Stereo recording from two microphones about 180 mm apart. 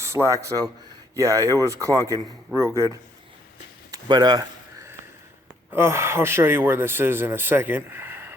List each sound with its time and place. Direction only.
0.0 s speech: 15° right (ahead or behind)
3.9 s a sound: 25° right (ahead or behind)
5.7 s speech: 15° right (ahead or behind)